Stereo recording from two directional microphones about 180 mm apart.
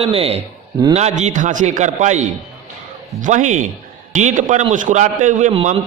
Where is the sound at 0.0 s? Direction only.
35° right (ahead or behind).